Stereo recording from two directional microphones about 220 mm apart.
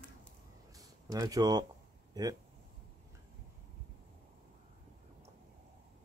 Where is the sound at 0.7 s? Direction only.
15° right (ahead or behind).